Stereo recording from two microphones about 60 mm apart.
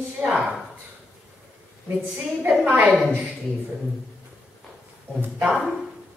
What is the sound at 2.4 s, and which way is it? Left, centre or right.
Speech, right.